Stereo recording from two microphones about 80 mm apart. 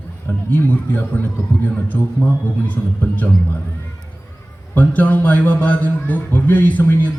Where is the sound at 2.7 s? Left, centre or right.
Centre.